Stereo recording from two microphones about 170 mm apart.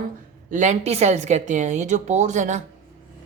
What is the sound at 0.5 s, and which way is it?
Speech, 45° right (ahead or behind).